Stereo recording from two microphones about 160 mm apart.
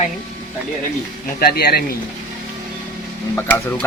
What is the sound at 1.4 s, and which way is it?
Speech, 75° left (ahead or behind).